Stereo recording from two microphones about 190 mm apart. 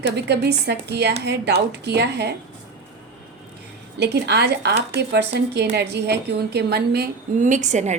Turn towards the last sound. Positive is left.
turn(degrees=-40)  # may be behind; listen again after turning